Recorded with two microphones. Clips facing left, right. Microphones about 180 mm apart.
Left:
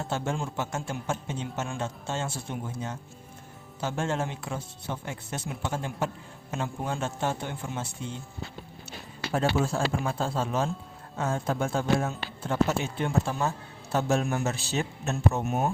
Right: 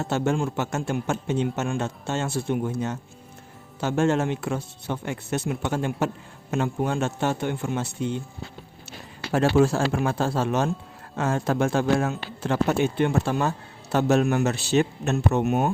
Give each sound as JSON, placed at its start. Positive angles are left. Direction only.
{"t": 0.0, "sound": "a man's voice", "side_deg": -70}
{"t": 9.3, "sound": "a man's voice", "side_deg": -85}
{"t": 11.2, "sound": "a man's voice", "side_deg": -90}